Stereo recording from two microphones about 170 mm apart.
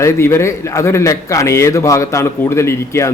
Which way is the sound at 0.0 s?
15° left (ahead or behind).